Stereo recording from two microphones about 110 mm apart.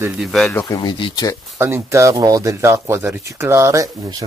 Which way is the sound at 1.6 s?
25° right (ahead or behind).